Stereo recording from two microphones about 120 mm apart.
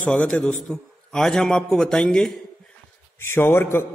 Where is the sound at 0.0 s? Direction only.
10° left (ahead or behind).